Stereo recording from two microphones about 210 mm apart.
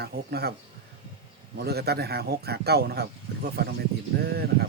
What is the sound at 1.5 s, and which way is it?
Speech, 50° right (ahead or behind).